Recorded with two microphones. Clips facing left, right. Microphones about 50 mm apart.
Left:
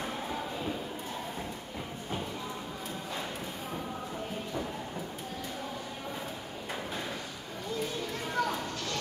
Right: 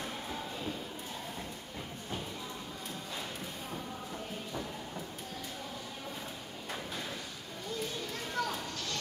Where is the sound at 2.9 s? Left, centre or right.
Centre.